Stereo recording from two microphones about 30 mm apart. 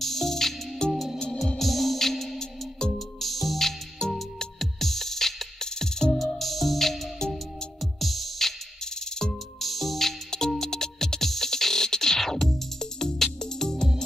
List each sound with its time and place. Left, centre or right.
0.0 s music: centre
2.3 s music: left
3.2 s music: centre
6.1 s music: centre
9.6 s music: centre; by 13.8 s left